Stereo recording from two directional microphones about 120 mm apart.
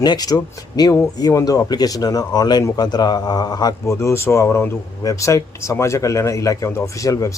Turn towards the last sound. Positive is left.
turn(degrees=25)  # may be behind; listen again after turning